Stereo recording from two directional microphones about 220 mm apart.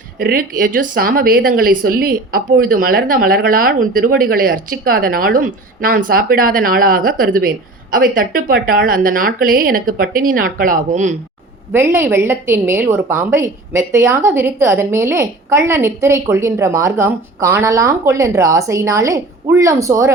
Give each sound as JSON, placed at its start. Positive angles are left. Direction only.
{"t": 0.2, "sound": "speech", "side_deg": -40}
{"t": 11.7, "sound": "a woman's voice", "side_deg": -10}